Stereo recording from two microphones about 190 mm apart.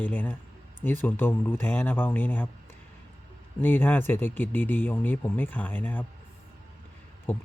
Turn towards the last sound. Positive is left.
turn(degrees=10)  # may be behind; listen again after turning